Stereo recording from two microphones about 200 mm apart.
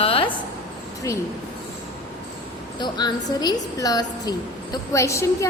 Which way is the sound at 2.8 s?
20° left (ahead or behind).